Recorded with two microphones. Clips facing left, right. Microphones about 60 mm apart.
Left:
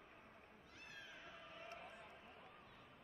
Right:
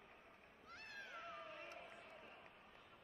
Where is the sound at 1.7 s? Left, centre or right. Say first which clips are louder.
Left 1 dB; left.